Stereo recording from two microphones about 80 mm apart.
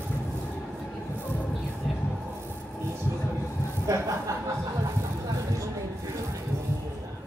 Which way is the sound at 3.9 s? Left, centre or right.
Right.